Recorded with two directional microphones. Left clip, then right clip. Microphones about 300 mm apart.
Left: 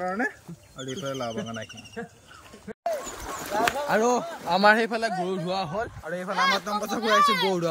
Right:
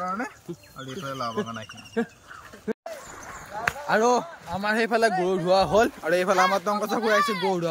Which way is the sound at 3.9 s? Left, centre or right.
Centre.